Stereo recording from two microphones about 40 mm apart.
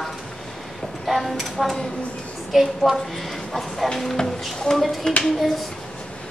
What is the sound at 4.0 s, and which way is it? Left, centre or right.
Speech, centre.